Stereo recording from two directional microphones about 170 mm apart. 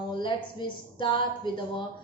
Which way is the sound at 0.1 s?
30° left (ahead or behind).